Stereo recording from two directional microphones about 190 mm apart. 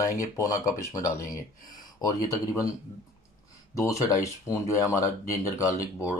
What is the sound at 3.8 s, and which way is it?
Speech, 15° left (ahead or behind).